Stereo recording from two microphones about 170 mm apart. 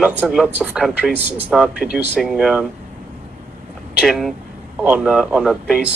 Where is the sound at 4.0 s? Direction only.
Centre (ahead or behind).